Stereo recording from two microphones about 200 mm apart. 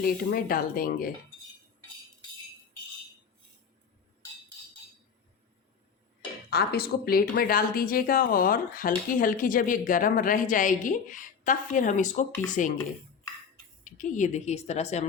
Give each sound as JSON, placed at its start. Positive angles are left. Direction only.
{"t": 0.0, "sound": "speech", "side_deg": 45}
{"t": 6.5, "sound": "a woman's voice", "side_deg": 50}
{"t": 13.8, "sound": "a woman's voice", "side_deg": 40}